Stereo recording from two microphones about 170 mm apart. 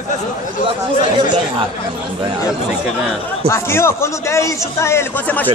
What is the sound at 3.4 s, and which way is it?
A man's voice, 15° left (ahead or behind).